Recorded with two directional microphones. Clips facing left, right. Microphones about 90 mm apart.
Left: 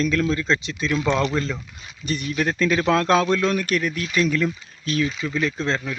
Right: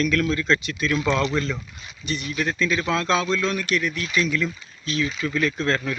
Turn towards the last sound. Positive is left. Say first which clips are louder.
# right 1 dB
turn(degrees=25)  # may be behind; listen again after turning